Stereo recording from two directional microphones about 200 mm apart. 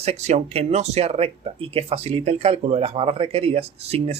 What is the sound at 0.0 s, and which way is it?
Speech, 30° right (ahead or behind).